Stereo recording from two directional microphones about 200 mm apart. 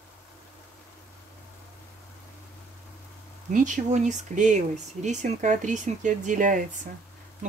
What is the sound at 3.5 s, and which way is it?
Speech, 40° right (ahead or behind).